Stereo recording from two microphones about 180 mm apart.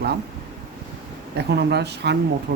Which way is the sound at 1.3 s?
65° right (ahead or behind).